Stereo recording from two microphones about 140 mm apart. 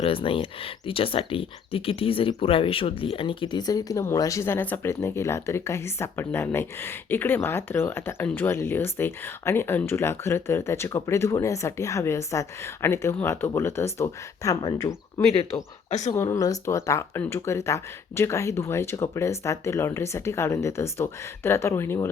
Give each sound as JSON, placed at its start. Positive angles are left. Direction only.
{"t": 0.0, "sound": "speech", "side_deg": 40}
{"t": 15.9, "sound": "speech", "side_deg": 55}
{"t": 16.1, "sound": "speech", "side_deg": 20}